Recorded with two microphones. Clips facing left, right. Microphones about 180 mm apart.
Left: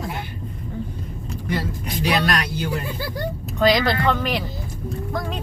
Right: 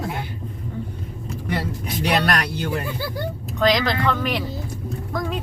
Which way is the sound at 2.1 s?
60° right (ahead or behind).